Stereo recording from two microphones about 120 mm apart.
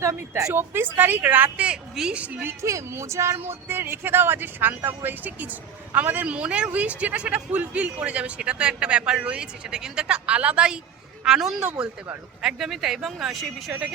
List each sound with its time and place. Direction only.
0.0 s a woman's voice: 25° right (ahead or behind); by 13.9 s 5° right (ahead or behind)